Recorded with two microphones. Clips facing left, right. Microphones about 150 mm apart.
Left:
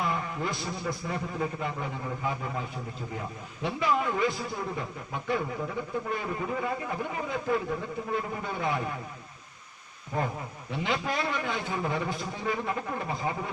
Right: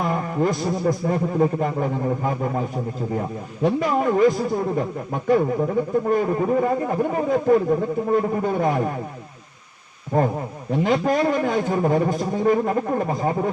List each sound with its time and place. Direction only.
0.0 s a man's voice: 45° right (ahead or behind)
10.1 s a man's voice: 45° right (ahead or behind)